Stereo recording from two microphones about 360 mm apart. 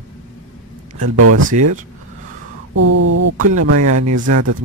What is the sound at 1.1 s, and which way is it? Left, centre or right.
Speech, right.